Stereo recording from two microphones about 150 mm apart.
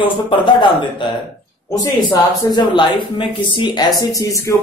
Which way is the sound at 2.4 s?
30° left (ahead or behind).